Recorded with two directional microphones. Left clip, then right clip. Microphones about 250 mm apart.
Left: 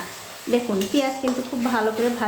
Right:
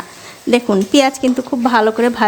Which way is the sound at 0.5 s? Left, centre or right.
Right.